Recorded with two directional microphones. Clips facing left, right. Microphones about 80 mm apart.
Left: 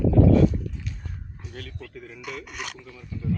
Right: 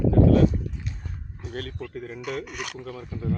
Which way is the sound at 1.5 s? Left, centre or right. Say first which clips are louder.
Right 7 dB; right.